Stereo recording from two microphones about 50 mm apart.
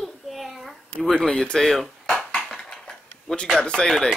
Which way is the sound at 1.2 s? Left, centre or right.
Centre.